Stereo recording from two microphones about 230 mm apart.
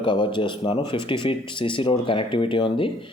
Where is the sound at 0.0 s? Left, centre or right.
Left.